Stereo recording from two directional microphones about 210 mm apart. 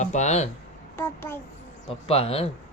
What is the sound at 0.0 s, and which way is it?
Speech, 35° left (ahead or behind).